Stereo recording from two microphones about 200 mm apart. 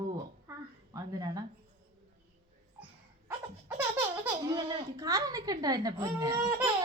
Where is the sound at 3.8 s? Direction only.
10° right (ahead or behind).